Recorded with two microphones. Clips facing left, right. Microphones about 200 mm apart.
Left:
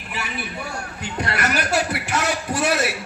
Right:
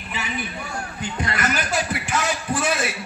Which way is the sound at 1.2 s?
70° left (ahead or behind).